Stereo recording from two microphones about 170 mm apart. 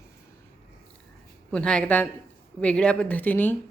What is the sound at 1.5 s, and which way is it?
Speech, 5° left (ahead or behind).